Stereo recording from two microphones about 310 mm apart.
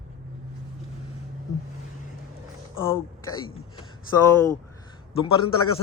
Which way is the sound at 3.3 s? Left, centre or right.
Centre.